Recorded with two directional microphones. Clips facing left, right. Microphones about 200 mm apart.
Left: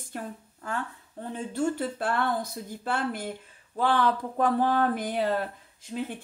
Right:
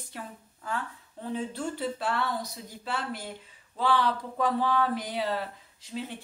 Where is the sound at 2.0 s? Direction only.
50° left (ahead or behind).